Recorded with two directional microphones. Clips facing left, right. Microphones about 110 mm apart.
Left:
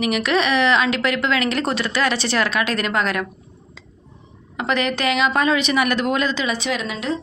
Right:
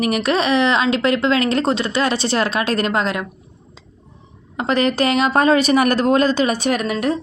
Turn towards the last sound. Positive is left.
turn(degrees=-55)  # may be behind; listen again after turning